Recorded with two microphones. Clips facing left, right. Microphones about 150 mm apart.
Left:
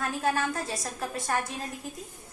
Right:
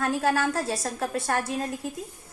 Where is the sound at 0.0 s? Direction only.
70° right (ahead or behind).